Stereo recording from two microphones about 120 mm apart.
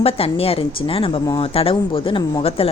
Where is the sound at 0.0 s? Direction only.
55° left (ahead or behind).